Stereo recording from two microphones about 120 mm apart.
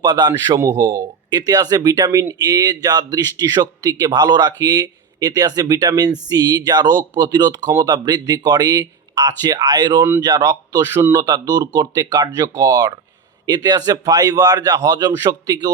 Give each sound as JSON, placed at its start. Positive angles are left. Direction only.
{"t": 0.0, "sound": "speech", "side_deg": -35}
{"t": 10.0, "sound": "speech", "side_deg": -20}